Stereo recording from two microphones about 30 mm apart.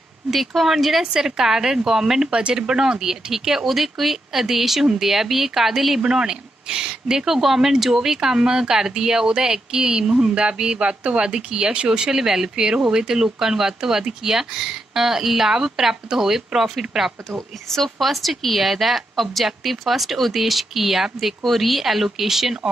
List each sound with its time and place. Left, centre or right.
0.7 s speech: centre
1.1 s speech: centre
5.9 s speech: right
11.7 s speech: right
12.0 s speech: right
17.9 s speech: centre